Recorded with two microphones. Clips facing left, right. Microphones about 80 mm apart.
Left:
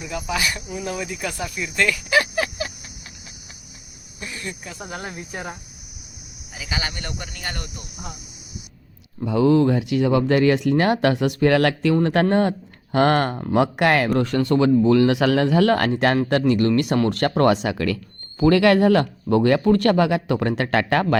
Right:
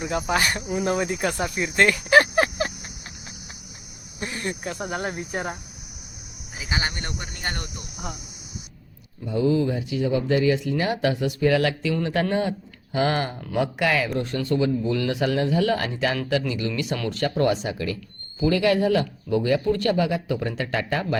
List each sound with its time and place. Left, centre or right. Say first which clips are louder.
0.0 s speech: right 2 dB; right
4.2 s speech: right 4 dB; right
6.6 s speech: right 1 dB; right
9.2 s speech: left 5 dB; left